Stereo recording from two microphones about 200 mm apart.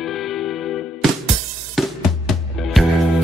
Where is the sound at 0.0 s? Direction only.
Centre (ahead or behind).